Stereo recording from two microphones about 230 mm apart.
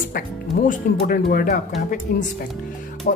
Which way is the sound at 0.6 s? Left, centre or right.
Left.